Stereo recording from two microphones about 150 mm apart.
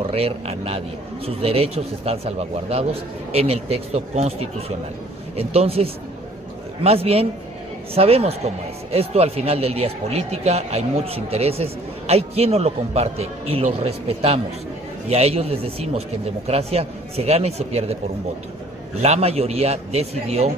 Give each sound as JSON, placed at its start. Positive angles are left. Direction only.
{"t": 0.0, "sound": "a man's voice", "side_deg": -40}
{"t": 18.9, "sound": "speech", "side_deg": -45}